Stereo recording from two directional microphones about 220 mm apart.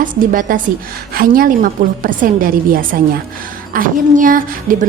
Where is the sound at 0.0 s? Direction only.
40° right (ahead or behind).